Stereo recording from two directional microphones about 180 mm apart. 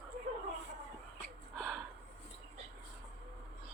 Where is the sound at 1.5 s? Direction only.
Centre (ahead or behind).